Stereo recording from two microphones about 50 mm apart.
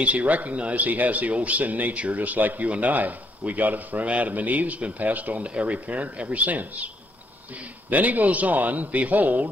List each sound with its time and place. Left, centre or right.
0.0 s speech: right
7.9 s speech: right